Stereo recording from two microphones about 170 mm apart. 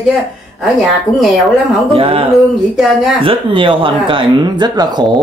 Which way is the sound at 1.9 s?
35° right (ahead or behind).